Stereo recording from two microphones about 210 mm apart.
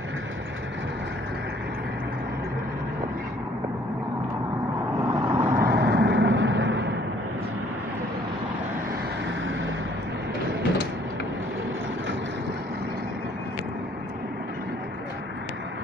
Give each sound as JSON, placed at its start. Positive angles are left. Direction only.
{"t": 5.2, "sound": "vehicle", "side_deg": -20}
{"t": 5.5, "sound": "vehicle", "side_deg": -45}